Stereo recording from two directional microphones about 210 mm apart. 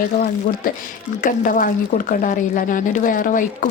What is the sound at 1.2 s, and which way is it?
A woman's voice, 40° left (ahead or behind).